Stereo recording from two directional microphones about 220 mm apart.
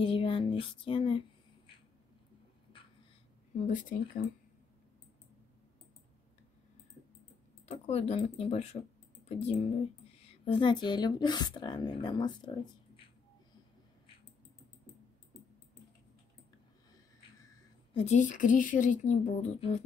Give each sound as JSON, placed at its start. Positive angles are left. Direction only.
{"t": 0.0, "sound": "a sound", "side_deg": 25}
{"t": 3.5, "sound": "speech", "side_deg": 35}
{"t": 7.6, "sound": "speech", "side_deg": 30}
{"t": 17.9, "sound": "speech", "side_deg": 30}